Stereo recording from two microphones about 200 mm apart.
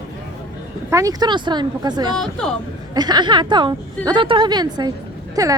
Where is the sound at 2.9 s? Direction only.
20° right (ahead or behind).